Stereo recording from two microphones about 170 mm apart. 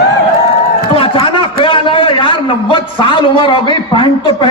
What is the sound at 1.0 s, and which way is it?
A man's voice, 30° left (ahead or behind).